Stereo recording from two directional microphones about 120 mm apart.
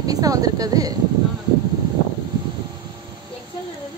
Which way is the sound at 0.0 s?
30° right (ahead or behind).